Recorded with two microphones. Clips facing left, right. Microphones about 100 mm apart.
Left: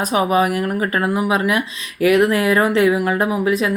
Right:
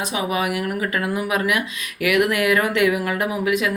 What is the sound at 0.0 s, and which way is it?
Speech, 40° left (ahead or behind).